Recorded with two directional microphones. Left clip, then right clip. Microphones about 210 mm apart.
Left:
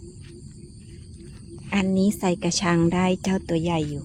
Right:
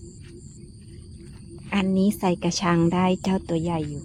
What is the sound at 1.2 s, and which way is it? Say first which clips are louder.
Wild animals: left 2 dB; centre (ahead or behind).